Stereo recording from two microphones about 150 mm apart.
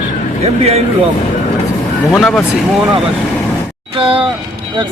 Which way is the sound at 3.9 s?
35° right (ahead or behind).